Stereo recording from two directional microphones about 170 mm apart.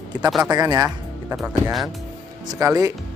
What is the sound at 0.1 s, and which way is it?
Speech, 25° right (ahead or behind).